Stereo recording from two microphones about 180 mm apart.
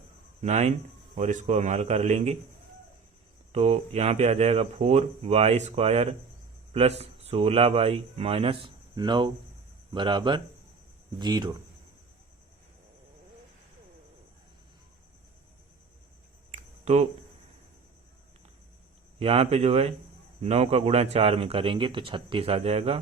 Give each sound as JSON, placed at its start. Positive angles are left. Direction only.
{"t": 0.4, "sound": "speech", "side_deg": -40}
{"t": 3.5, "sound": "a man's voice", "side_deg": -35}
{"t": 16.5, "sound": "a sound", "side_deg": -40}
{"t": 19.2, "sound": "speech", "side_deg": -35}